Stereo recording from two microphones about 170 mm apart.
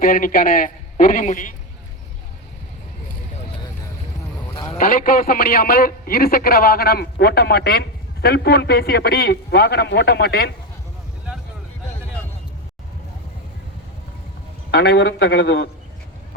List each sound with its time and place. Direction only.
0.0 s a man's voice: 55° left (ahead or behind)
4.8 s a man's voice: 55° left (ahead or behind)
14.7 s a man's voice: 75° left (ahead or behind)